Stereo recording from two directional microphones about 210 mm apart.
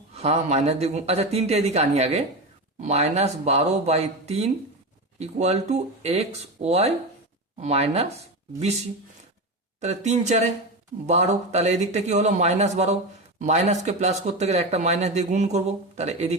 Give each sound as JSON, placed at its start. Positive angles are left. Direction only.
{"t": 0.2, "sound": "speech", "side_deg": -30}
{"t": 9.8, "sound": "speech", "side_deg": -30}